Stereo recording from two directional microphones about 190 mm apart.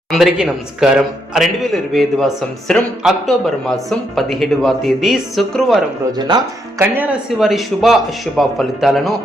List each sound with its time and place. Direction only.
0.1 s a man's voice: centre (ahead or behind)
6.1 s speech: 20° right (ahead or behind)
6.8 s a man's voice: 10° right (ahead or behind)